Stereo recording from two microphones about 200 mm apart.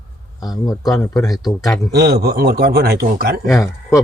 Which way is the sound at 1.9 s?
55° right (ahead or behind).